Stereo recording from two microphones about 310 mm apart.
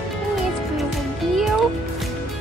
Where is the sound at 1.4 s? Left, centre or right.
Centre.